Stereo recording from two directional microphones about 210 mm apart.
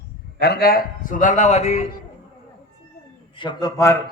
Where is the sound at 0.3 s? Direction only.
50° left (ahead or behind); by 1.9 s 30° left (ahead or behind).